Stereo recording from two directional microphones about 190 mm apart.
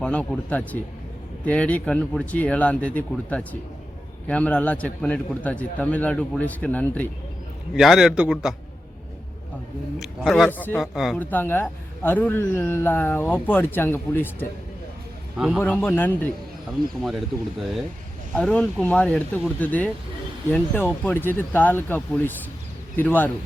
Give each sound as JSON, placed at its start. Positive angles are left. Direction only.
{"t": 0.0, "sound": "a man's voice", "side_deg": 5}
{"t": 7.8, "sound": "speech", "side_deg": 0}
{"t": 10.0, "sound": "speech", "side_deg": 0}
{"t": 10.9, "sound": "speech", "side_deg": 0}
{"t": 11.2, "sound": "a man's voice", "side_deg": 10}
{"t": 15.4, "sound": "speech", "side_deg": -5}
{"t": 15.6, "sound": "a man's voice", "side_deg": 10}
{"t": 17.0, "sound": "a man's voice", "side_deg": 0}